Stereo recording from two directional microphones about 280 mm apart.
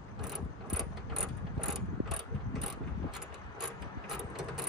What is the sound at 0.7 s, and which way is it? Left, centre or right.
Mechanisms, centre.